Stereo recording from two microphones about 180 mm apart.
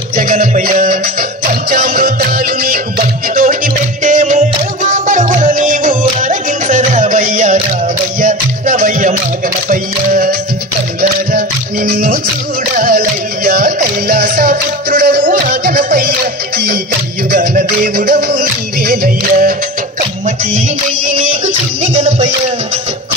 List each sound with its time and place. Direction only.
0.1 s music: 50° right (ahead or behind)
17.3 s music: 50° right (ahead or behind)
21.1 s music: 90° right